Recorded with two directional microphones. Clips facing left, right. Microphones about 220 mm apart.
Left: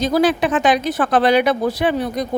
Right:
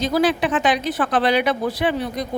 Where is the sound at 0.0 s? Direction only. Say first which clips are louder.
Left 3 dB; 45° left (ahead or behind).